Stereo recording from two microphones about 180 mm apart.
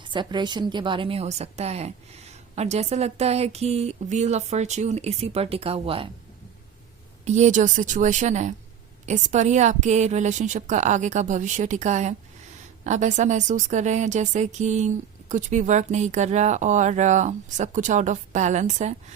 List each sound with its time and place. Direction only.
0.0 s a woman's voice: 25° right (ahead or behind)
7.3 s a woman's voice: 40° right (ahead or behind)